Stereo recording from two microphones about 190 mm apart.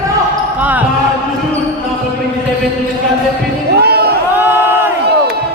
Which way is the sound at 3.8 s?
55° right (ahead or behind).